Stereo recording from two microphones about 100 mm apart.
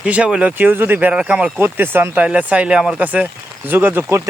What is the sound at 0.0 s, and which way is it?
Speech, 10° right (ahead or behind).